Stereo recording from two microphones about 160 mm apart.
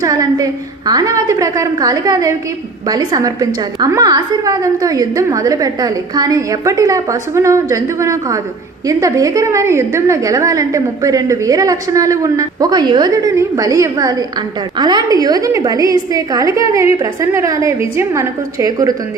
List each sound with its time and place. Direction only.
0.0 s a woman's voice: 20° right (ahead or behind)